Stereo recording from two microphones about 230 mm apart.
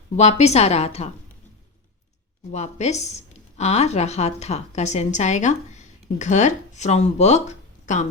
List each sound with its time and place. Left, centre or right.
0.2 s a woman's voice: left
2.5 s speech: left